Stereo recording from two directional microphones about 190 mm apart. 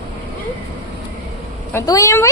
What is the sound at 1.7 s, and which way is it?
Speech, 15° left (ahead or behind).